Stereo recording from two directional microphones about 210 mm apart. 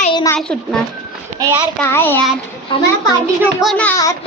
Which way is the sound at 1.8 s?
10° left (ahead or behind).